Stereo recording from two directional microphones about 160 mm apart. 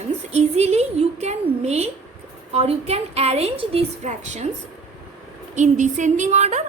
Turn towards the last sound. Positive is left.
turn(degrees=-45)  # may be behind; listen again after turning